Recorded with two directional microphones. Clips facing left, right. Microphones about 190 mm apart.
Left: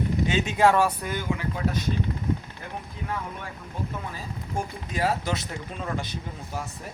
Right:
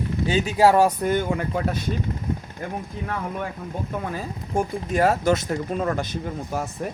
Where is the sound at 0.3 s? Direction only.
35° right (ahead or behind); by 1.6 s 50° right (ahead or behind).